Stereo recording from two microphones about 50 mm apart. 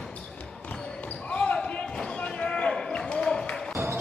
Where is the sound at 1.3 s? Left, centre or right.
Left.